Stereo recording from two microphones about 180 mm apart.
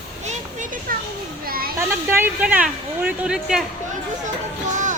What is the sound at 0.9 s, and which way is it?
Children playing, 50° right (ahead or behind).